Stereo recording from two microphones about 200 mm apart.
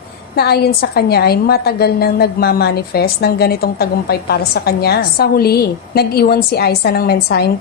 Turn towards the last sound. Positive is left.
turn(degrees=55)  # may be behind; listen again after turning